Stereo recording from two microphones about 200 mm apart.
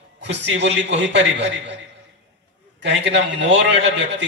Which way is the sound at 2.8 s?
65° right (ahead or behind).